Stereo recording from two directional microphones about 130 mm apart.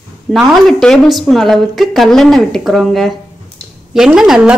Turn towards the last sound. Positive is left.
turn(degrees=-5)  # may be behind; listen again after turning